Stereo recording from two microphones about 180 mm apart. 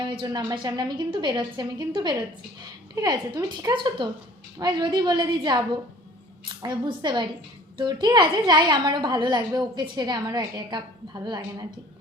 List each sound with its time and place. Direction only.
0.0 s a woman's voice: 25° right (ahead or behind)